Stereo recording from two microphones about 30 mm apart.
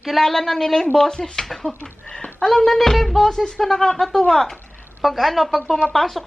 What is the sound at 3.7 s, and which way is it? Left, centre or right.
Speech, left.